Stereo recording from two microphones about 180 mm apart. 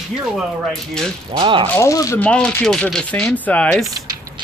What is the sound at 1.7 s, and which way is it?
Speech, 15° left (ahead or behind).